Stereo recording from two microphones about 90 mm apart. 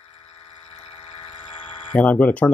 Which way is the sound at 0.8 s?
75° left (ahead or behind).